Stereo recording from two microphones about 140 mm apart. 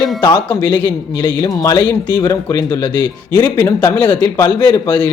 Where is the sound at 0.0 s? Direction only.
30° left (ahead or behind).